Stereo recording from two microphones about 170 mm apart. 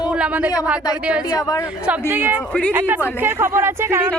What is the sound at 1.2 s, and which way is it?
Speech, 20° left (ahead or behind).